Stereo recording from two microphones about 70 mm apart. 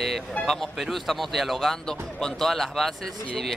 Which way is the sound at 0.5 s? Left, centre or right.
Centre.